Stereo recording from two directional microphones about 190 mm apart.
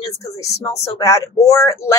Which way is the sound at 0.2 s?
15° left (ahead or behind).